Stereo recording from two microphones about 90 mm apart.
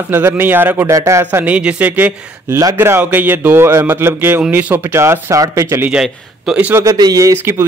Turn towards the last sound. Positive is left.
turn(degrees=-40)  # may be behind; listen again after turning